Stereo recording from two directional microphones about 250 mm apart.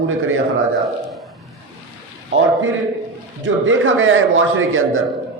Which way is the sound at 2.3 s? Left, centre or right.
Right.